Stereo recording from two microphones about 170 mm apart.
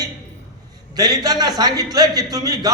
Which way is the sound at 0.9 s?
20° right (ahead or behind).